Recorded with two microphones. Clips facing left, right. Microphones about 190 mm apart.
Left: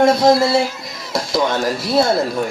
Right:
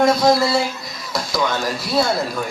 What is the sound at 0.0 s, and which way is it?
A man's voice, 25° left (ahead or behind).